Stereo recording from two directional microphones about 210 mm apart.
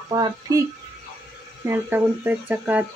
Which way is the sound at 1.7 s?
10° right (ahead or behind).